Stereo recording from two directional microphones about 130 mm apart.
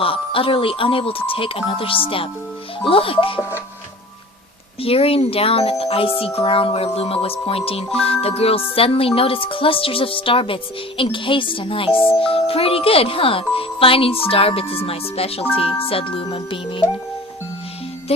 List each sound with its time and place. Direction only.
0.0 s speech: 45° left (ahead or behind)
4.8 s speech: 45° left (ahead or behind)